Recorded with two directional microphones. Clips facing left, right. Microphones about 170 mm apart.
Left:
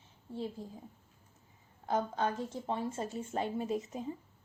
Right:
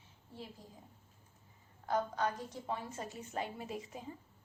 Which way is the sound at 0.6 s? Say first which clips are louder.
Left 11 dB; 25° left (ahead or behind).